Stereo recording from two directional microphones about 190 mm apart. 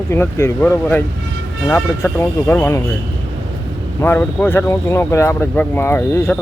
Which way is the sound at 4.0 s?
10° left (ahead or behind).